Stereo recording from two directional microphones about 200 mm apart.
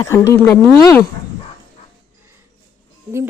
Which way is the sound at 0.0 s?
15° left (ahead or behind).